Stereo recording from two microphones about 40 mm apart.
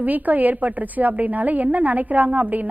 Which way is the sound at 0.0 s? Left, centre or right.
Right.